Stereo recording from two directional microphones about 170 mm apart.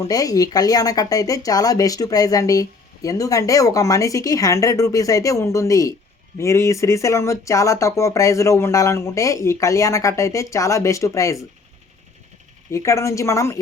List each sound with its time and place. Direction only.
0.0 s speech: 20° left (ahead or behind)
12.7 s speech: 15° left (ahead or behind)